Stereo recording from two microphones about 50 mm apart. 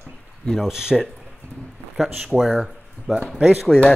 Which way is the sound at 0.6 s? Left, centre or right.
Centre.